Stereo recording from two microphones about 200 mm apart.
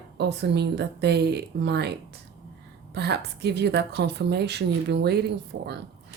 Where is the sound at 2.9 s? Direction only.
55° right (ahead or behind).